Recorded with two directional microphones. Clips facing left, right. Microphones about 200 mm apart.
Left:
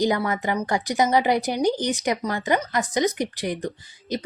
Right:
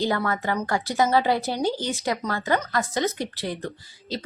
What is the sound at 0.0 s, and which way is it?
A woman's voice, 15° left (ahead or behind).